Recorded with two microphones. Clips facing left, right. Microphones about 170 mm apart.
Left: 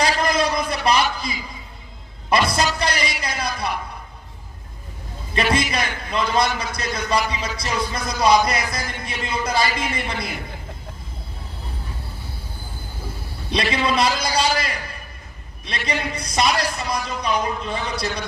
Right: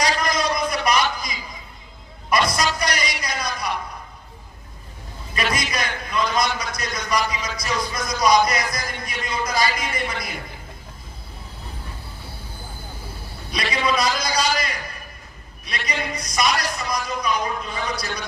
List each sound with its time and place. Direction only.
0.0 s a sound: 30° left (ahead or behind)
2.5 s a man's voice: 30° left (ahead or behind)
5.3 s a man's voice: 30° left (ahead or behind)
13.5 s a man's voice: 30° left (ahead or behind)